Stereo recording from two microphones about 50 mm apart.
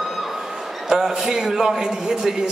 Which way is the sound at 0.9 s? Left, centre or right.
Centre.